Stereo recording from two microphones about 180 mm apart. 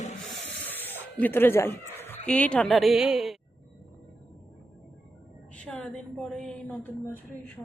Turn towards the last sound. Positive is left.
turn(degrees=5)  # may be behind; listen again after turning